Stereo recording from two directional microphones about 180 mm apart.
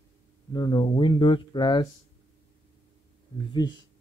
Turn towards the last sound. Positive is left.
turn(degrees=25)  # may be behind; listen again after turning